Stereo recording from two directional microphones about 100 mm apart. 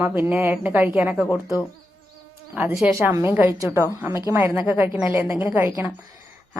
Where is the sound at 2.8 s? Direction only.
25° right (ahead or behind).